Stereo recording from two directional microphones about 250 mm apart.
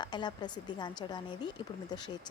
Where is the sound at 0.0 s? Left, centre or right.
Centre.